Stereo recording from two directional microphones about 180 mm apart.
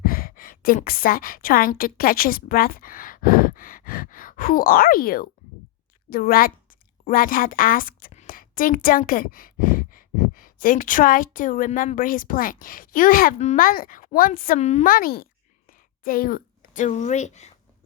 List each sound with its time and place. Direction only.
0.0 s a woman's voice: 55° left (ahead or behind); by 14.8 s 40° left (ahead or behind)
14.8 s speech: 55° left (ahead or behind)